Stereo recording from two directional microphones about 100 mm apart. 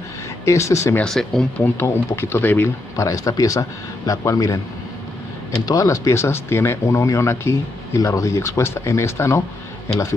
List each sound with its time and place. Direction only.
0.5 s speech: 30° left (ahead or behind)
1.0 s speech: 5° left (ahead or behind)
1.6 s speech: 25° left (ahead or behind)
3.0 s speech: 35° left (ahead or behind)
5.7 s speech: 35° left (ahead or behind)